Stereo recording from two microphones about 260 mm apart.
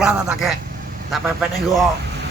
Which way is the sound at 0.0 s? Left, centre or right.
Centre.